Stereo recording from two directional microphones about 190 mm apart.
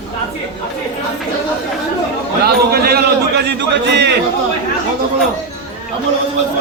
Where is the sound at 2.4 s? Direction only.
55° right (ahead or behind).